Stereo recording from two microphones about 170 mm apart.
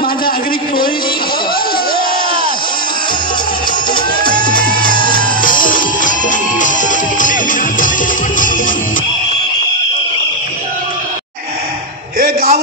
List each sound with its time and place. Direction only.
3.9 s music: 25° left (ahead or behind)
5.4 s music: 55° left (ahead or behind)
12.2 s a sound: 60° right (ahead or behind)